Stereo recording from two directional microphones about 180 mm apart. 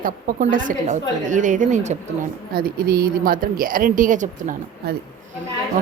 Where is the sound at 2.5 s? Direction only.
55° right (ahead or behind).